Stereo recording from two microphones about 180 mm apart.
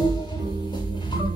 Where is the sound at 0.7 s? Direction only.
25° left (ahead or behind).